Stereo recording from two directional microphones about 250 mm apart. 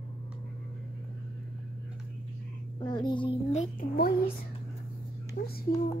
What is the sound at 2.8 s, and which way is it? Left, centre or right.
A child's voice, centre.